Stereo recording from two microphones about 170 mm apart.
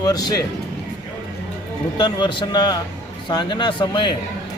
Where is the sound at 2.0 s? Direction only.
25° left (ahead or behind).